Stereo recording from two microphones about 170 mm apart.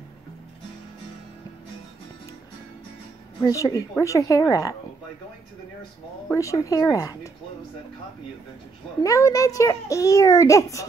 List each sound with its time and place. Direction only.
3.4 s a child's voice: 20° left (ahead or behind)
6.2 s a child's voice: 20° left (ahead or behind)
9.0 s a child's voice: 20° left (ahead or behind)